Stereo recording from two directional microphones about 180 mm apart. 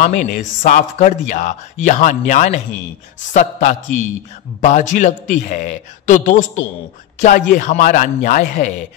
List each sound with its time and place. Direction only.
0.0 s speech: 45° left (ahead or behind)